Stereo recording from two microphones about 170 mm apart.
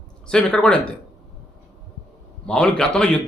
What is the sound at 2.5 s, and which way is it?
Speech, 5° left (ahead or behind).